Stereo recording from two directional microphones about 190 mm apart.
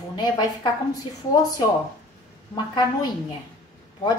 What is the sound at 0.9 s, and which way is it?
A woman's voice, 20° left (ahead or behind).